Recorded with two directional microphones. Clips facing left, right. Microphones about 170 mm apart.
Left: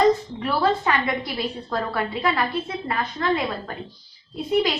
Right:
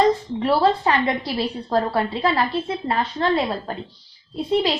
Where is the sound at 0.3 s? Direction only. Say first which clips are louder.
Right 4 dB; 30° right (ahead or behind).